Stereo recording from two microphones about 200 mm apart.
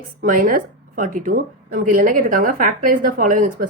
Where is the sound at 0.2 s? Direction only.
40° right (ahead or behind).